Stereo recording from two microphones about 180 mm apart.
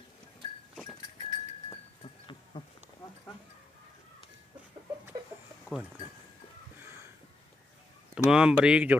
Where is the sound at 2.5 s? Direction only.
25° left (ahead or behind).